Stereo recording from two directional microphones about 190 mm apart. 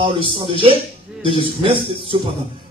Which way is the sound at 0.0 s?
30° right (ahead or behind).